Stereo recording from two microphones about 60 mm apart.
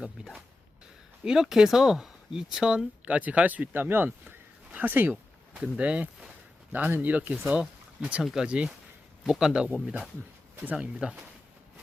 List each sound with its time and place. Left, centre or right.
0.2 s speech: centre
3.1 s speech: right
5.1 s speech: centre
6.7 s speech: right
7.6 s speech: centre
8.4 s speech: centre